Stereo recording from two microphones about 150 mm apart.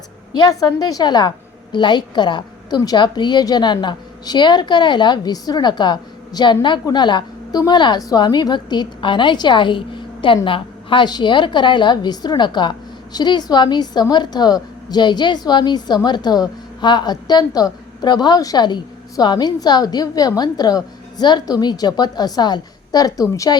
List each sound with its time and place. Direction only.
0.3 s a woman's voice: 25° left (ahead or behind)